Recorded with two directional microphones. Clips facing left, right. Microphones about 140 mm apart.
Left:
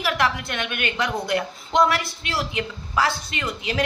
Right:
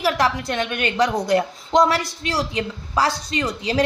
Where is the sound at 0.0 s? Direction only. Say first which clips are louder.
Right 3 dB; 35° right (ahead or behind).